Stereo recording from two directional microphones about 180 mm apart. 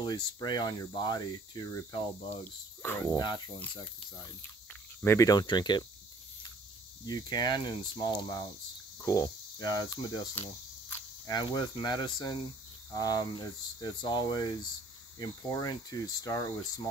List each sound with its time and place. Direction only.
0.0 s speech: 20° left (ahead or behind)
5.0 s speech: 15° left (ahead or behind)
7.1 s speech: 25° left (ahead or behind)